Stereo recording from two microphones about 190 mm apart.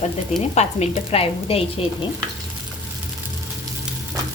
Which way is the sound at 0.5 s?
35° left (ahead or behind).